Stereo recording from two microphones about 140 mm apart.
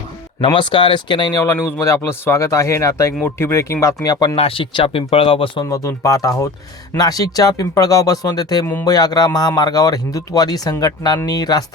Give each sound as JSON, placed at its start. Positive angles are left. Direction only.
{"t": 0.4, "sound": "speech", "side_deg": 35}
{"t": 1.5, "sound": "speech", "side_deg": 10}
{"t": 1.8, "sound": "speech", "side_deg": 20}
{"t": 4.4, "sound": "speech", "side_deg": 40}
{"t": 5.6, "sound": "speech", "side_deg": 20}